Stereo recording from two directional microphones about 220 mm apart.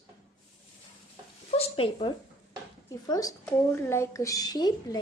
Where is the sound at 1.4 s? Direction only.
25° left (ahead or behind).